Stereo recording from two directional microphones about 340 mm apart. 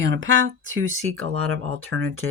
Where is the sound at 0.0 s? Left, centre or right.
Right.